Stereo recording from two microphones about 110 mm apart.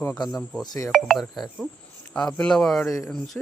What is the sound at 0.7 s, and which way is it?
Speech, 30° left (ahead or behind).